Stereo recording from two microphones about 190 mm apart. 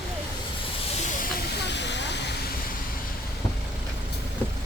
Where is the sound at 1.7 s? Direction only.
65° left (ahead or behind).